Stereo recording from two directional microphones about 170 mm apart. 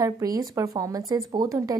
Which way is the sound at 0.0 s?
20° right (ahead or behind).